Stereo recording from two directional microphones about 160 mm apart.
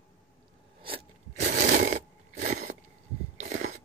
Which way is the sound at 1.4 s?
50° right (ahead or behind).